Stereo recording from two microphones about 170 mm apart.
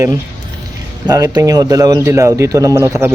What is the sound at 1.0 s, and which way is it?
Speech, 20° right (ahead or behind).